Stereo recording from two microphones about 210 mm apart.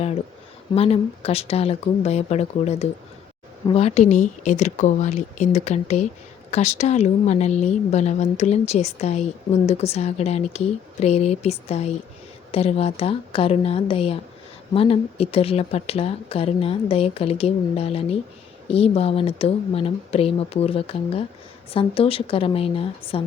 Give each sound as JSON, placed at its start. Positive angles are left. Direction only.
{"t": 0.7, "sound": "speech", "side_deg": 30}